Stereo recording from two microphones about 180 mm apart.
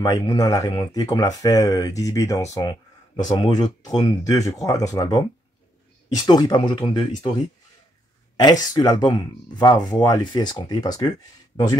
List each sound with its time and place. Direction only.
0.0 s speech: 20° left (ahead or behind)
8.4 s speech: 20° left (ahead or behind)